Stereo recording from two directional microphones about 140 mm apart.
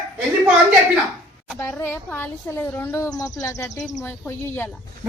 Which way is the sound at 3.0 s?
25° left (ahead or behind).